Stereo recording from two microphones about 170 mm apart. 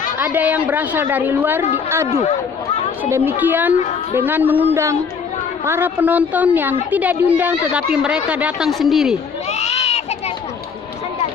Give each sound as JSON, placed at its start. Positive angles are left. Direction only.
{"t": 0.2, "sound": "a woman's voice", "side_deg": -10}
{"t": 3.0, "sound": "a woman's voice", "side_deg": -10}
{"t": 9.5, "sound": "a sound", "side_deg": 40}